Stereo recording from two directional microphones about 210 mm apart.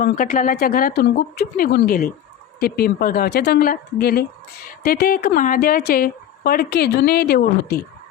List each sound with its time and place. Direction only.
0.1 s speech: 40° left (ahead or behind)